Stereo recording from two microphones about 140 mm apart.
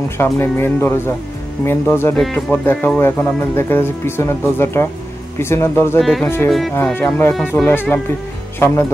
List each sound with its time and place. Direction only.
0.2 s speech: 15° left (ahead or behind)
5.9 s speech: centre (ahead or behind)
6.2 s speech: 15° left (ahead or behind)